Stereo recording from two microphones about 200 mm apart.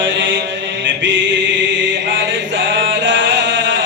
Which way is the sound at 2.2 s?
65° right (ahead or behind).